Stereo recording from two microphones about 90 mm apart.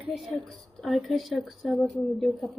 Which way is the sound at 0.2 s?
Centre (ahead or behind).